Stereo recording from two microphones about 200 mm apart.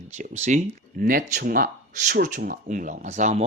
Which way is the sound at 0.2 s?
35° right (ahead or behind).